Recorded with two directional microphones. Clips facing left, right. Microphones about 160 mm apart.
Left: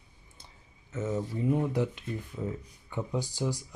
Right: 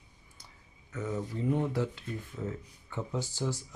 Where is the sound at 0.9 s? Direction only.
25° left (ahead or behind).